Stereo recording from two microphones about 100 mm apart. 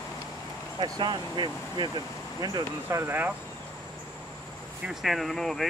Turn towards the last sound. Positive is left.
turn(degrees=5)  # may be behind; listen again after turning